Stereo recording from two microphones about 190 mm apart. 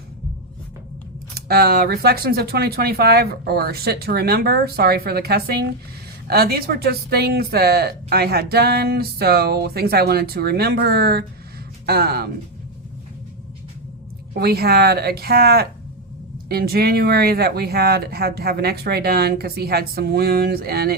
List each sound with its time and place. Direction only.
1.4 s speech: 55° right (ahead or behind)
14.3 s speech: 55° right (ahead or behind)